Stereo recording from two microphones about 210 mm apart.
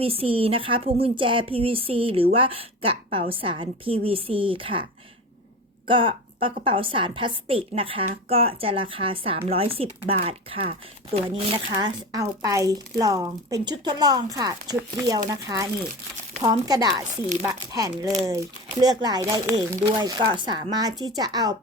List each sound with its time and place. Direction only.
0.0 s a woman's voice: 25° right (ahead or behind)
5.9 s a woman's voice: 25° right (ahead or behind)
12.1 s a woman's voice: 15° right (ahead or behind)
16.6 s a woman's voice: 20° right (ahead or behind)